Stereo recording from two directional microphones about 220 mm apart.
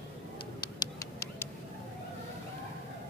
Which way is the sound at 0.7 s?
15° left (ahead or behind).